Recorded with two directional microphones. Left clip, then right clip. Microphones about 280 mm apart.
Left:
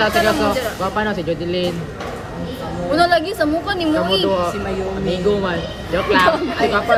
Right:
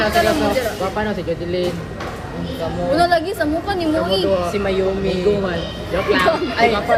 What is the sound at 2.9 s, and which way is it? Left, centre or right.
A woman's voice, centre.